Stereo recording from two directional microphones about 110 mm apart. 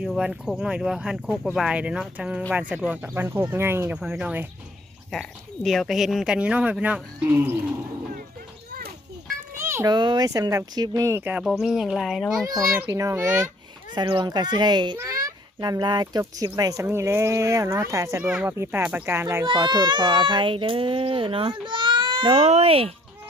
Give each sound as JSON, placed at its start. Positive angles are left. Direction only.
{"t": 0.0, "sound": "speech", "side_deg": -5}
{"t": 5.1, "sound": "speech", "side_deg": 0}
{"t": 9.6, "sound": "a sound", "side_deg": -20}
{"t": 9.8, "sound": "speech", "side_deg": -40}
{"t": 11.4, "sound": "speech", "side_deg": 0}
{"t": 12.8, "sound": "speech", "side_deg": -25}
{"t": 13.9, "sound": "a child's voice", "side_deg": -45}
{"t": 14.9, "sound": "a child's voice", "side_deg": -30}
{"t": 16.8, "sound": "speech", "side_deg": -25}
{"t": 18.2, "sound": "speech", "side_deg": -15}
{"t": 19.5, "sound": "a child's voice", "side_deg": -45}